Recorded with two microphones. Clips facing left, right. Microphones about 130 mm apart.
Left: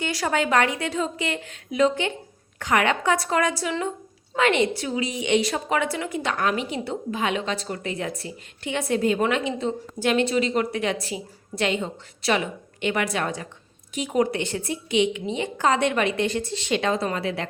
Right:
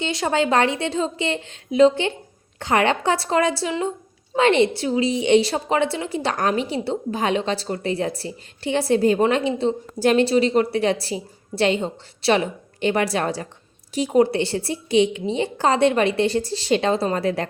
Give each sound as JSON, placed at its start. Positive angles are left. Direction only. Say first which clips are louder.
{"t": 0.0, "sound": "a woman's voice", "louder": "right 3 dB", "side_deg": -25}